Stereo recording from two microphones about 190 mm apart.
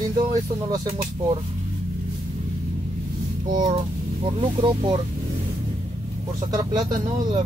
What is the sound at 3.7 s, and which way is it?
Speech, 30° right (ahead or behind).